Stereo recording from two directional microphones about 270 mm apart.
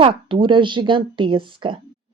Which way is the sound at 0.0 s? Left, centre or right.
Centre.